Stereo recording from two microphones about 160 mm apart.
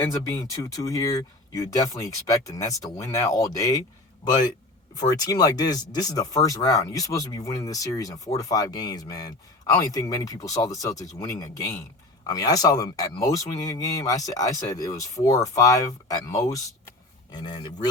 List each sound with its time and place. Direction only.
0.0 s speech: 20° left (ahead or behind)